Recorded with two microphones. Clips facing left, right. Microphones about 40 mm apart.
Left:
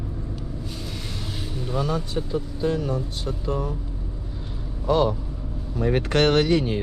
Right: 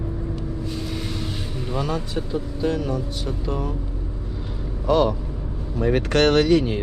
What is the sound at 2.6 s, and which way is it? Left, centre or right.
Speech, right.